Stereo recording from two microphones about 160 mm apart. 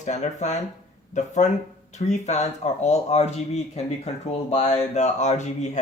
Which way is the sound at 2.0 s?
45° left (ahead or behind).